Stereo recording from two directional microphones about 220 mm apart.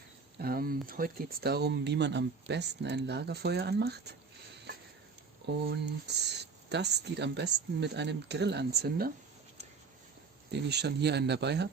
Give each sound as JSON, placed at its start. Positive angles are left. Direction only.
{"t": 0.4, "sound": "speech", "side_deg": -40}
{"t": 5.6, "sound": "speech", "side_deg": -50}
{"t": 10.5, "sound": "speech", "side_deg": -50}